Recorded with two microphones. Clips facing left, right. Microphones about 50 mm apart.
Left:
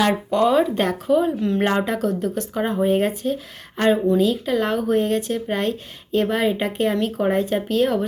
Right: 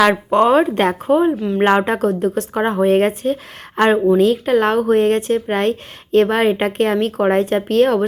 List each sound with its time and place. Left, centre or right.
0.3 s speech: right
1.4 s speech: centre
1.8 s speech: right